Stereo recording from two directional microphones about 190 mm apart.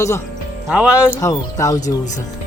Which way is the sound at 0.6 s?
5° right (ahead or behind).